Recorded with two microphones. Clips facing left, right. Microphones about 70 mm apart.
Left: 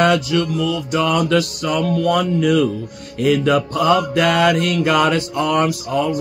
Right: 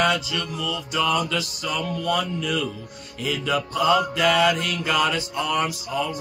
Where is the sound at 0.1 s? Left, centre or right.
Left.